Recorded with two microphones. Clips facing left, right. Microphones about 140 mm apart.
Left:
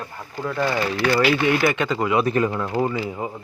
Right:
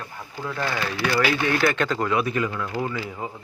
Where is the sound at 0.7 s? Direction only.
15° left (ahead or behind).